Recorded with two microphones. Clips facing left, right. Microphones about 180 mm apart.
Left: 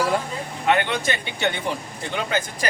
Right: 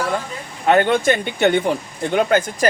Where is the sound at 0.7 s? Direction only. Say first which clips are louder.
Right 7 dB; 45° right (ahead or behind).